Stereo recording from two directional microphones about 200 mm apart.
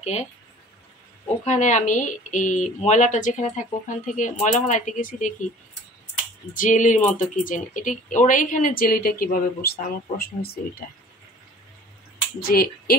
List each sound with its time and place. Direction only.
0.0 s speech: 35° left (ahead or behind)
1.4 s speech: 35° left (ahead or behind)
6.5 s speech: 40° left (ahead or behind)
12.4 s speech: 50° left (ahead or behind)